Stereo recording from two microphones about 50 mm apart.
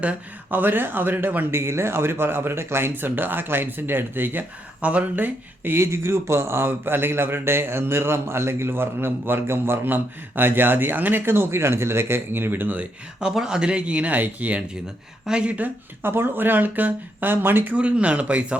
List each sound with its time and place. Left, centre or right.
0.5 s speech: right
1.5 s speech: right
2.9 s speech: right
4.8 s speech: right
5.7 s speech: right
13.1 s speech: centre; by 14.6 s right
15.3 s speech: centre
16.0 s speech: right
17.7 s speech: right